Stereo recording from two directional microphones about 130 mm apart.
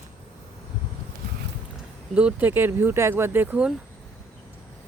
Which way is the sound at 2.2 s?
10° right (ahead or behind).